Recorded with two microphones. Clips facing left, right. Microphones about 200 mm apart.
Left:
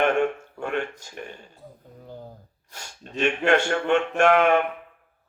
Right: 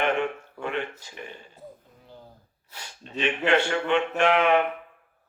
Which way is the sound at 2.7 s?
45° left (ahead or behind).